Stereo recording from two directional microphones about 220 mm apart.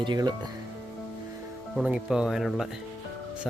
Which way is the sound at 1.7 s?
5° right (ahead or behind).